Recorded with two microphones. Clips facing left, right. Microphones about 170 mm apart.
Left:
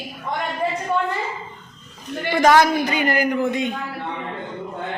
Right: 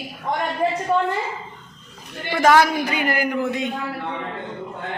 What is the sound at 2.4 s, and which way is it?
A man's voice, 5° right (ahead or behind).